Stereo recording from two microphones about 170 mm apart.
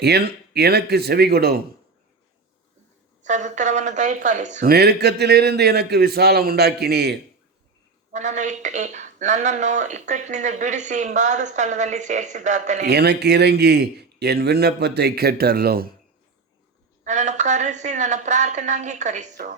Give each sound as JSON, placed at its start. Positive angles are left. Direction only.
{"t": 0.0, "sound": "speech", "side_deg": -75}
{"t": 3.2, "sound": "speech", "side_deg": -45}
{"t": 4.7, "sound": "speech", "side_deg": -75}
{"t": 8.1, "sound": "speech", "side_deg": -45}
{"t": 12.8, "sound": "speech", "side_deg": -75}
{"t": 17.0, "sound": "speech", "side_deg": -45}